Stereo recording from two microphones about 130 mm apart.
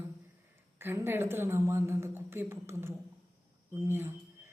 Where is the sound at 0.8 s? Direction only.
15° right (ahead or behind).